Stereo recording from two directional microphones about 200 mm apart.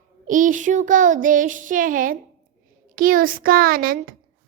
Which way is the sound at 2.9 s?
45° right (ahead or behind).